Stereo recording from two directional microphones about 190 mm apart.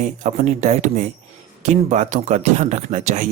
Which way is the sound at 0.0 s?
40° right (ahead or behind).